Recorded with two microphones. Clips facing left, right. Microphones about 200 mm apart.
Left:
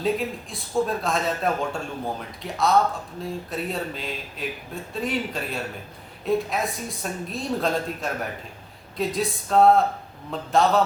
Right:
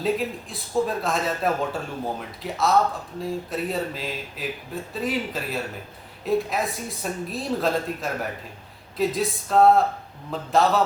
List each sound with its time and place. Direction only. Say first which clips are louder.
0.0 s speech: even; centre (ahead or behind)